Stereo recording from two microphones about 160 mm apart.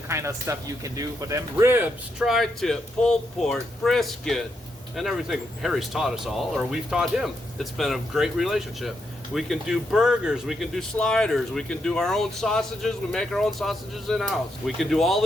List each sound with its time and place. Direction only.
0.1 s speech: 15° right (ahead or behind); by 15.2 s centre (ahead or behind)